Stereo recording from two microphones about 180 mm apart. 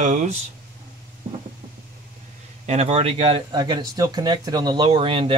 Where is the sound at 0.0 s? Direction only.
40° right (ahead or behind).